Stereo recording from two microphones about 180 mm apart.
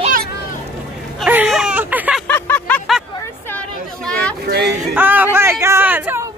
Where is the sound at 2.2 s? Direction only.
10° left (ahead or behind).